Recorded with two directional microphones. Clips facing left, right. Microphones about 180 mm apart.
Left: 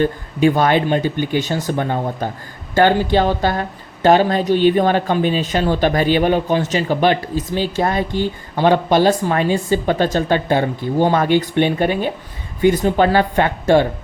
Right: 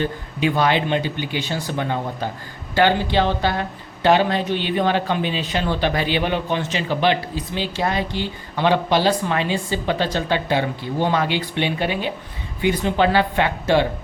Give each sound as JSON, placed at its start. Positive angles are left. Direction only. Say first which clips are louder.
{"t": 0.0, "sound": "speech", "louder": "left 7 dB", "side_deg": 45}